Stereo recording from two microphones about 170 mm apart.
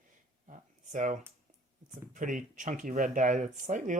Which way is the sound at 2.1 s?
50° right (ahead or behind).